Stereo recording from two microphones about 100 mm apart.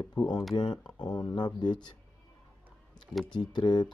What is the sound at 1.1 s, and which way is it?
Speech, 45° left (ahead or behind).